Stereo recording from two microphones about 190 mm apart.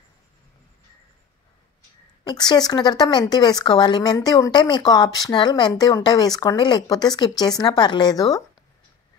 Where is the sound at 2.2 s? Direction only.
20° left (ahead or behind).